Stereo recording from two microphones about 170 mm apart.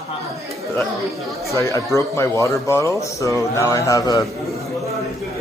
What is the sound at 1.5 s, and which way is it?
Speech, 20° left (ahead or behind).